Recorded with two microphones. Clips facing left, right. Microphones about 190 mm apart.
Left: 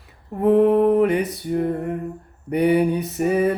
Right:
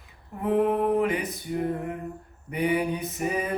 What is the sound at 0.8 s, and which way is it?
Music, 60° left (ahead or behind).